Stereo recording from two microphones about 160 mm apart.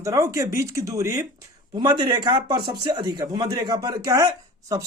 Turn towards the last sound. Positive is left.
turn(degrees=-20)  # may be behind; listen again after turning